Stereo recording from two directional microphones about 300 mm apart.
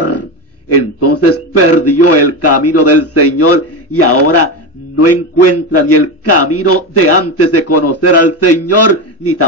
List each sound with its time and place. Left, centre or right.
0.7 s a man's voice: left